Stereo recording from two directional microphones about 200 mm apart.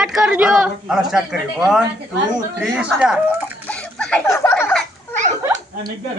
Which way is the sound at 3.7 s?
5° left (ahead or behind).